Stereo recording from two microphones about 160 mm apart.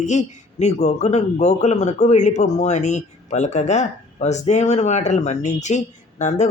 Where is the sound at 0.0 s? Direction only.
50° left (ahead or behind).